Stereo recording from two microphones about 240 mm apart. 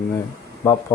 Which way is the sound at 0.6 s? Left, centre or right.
Centre.